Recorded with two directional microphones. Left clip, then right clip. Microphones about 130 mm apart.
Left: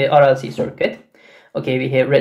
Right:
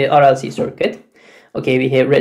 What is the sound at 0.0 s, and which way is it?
Speech, 30° right (ahead or behind).